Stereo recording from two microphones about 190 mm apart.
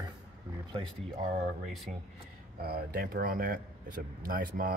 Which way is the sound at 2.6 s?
55° right (ahead or behind).